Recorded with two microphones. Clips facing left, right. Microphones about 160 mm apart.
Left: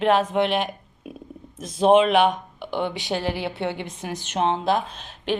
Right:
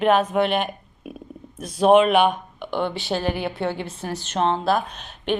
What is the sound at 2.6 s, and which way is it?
A woman's voice, 25° left (ahead or behind).